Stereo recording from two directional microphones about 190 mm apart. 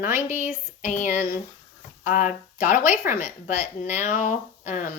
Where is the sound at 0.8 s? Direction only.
40° left (ahead or behind).